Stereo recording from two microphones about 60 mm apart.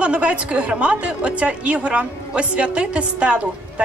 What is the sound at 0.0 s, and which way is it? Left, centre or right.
A woman's voice, centre.